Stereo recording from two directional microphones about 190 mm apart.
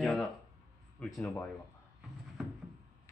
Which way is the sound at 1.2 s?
15° left (ahead or behind).